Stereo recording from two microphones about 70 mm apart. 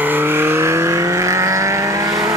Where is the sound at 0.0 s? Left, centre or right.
Right.